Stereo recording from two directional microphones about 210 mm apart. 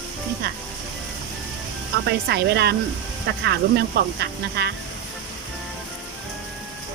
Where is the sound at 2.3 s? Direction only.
50° right (ahead or behind).